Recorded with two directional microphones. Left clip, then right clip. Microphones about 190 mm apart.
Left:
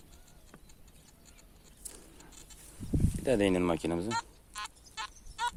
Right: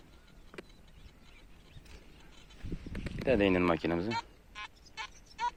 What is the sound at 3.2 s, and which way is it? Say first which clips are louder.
Speech: right 1 dB; 15° left (ahead or behind).